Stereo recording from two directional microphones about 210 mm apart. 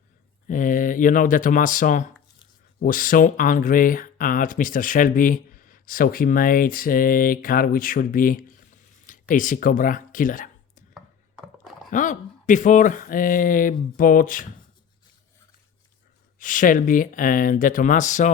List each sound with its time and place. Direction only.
0.4 s speech: 40° left (ahead or behind)
10.9 s a sound: centre (ahead or behind)
11.9 s speech: 35° left (ahead or behind)
16.4 s speech: 40° left (ahead or behind)